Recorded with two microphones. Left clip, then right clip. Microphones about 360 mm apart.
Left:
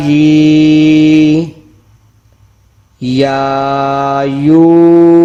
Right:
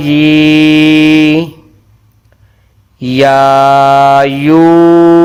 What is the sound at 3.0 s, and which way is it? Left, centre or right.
Mantra, right.